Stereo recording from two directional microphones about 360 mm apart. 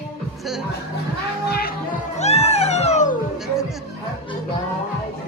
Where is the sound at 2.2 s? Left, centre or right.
Centre.